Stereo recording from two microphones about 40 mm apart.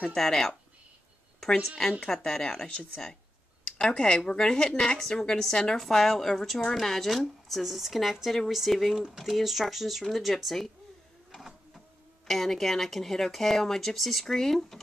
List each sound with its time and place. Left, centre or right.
0.0 s speech: centre
2.0 s speech: centre
11.3 s printer: centre
12.3 s speech: centre